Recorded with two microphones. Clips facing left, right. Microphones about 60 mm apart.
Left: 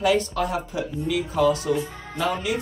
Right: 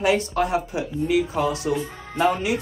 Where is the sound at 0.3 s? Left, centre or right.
Right.